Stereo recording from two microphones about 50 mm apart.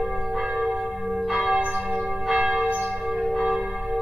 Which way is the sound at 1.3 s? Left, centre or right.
Centre.